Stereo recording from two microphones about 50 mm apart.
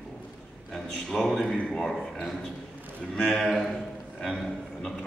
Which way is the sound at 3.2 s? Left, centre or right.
Centre.